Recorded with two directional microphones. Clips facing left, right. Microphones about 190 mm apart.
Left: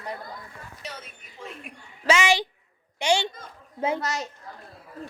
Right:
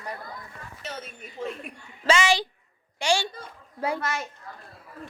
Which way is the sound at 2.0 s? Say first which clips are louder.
Even; 15° left (ahead or behind).